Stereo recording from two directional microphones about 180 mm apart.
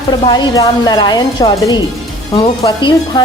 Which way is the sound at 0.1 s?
25° left (ahead or behind).